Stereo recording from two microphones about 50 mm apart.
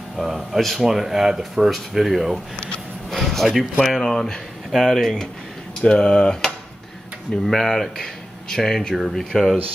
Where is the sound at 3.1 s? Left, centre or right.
Centre.